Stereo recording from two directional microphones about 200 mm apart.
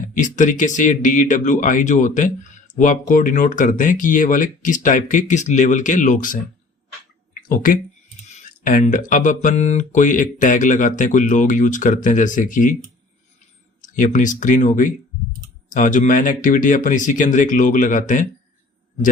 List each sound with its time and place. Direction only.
0.1 s speech: 40° left (ahead or behind)
7.4 s speech: 45° left (ahead or behind)
13.8 s speech: 40° left (ahead or behind)